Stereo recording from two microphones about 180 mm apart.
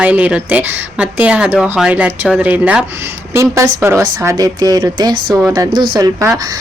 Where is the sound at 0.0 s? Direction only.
5° right (ahead or behind).